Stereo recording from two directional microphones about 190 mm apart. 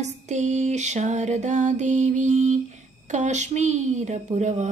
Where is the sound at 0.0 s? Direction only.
35° right (ahead or behind).